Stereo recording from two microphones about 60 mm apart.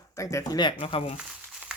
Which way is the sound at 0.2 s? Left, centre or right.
Left.